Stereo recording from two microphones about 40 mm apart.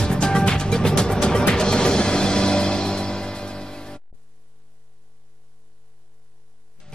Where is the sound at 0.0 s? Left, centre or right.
Centre.